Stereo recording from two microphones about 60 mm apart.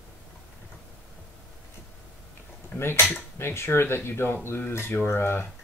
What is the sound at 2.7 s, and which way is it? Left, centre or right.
Speech, left.